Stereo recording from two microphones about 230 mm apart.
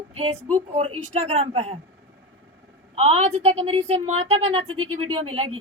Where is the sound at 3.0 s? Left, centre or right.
Right.